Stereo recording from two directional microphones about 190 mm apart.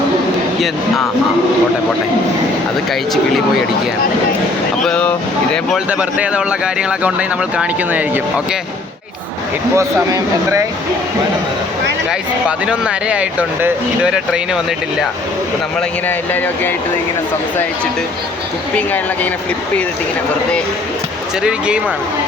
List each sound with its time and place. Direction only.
4.9 s speech: 5° left (ahead or behind)
5.9 s speech: 5° right (ahead or behind)
9.7 s speech: 15° right (ahead or behind)
12.5 s speech: 5° right (ahead or behind)
16.0 s speech: 10° left (ahead or behind)